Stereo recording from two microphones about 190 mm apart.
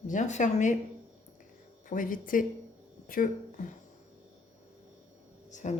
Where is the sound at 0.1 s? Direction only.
40° left (ahead or behind).